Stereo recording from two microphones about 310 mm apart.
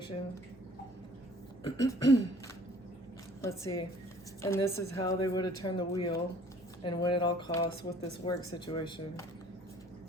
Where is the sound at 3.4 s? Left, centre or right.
Centre.